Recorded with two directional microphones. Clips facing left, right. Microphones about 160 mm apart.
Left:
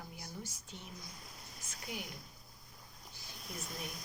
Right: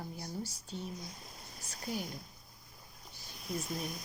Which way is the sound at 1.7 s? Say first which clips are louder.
Right 6 dB; 35° right (ahead or behind).